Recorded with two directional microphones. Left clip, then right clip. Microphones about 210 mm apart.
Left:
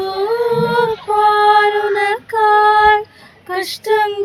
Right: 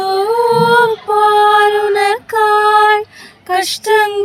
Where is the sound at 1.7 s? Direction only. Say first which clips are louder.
Right 3 dB; 45° right (ahead or behind).